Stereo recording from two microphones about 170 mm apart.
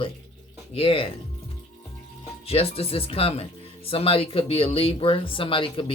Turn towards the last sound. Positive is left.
turn(degrees=30)  # may be behind; listen again after turning